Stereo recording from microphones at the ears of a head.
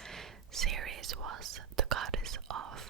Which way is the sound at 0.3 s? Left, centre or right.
Right.